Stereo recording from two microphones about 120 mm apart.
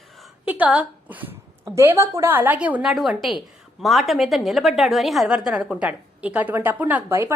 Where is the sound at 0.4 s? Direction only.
15° right (ahead or behind).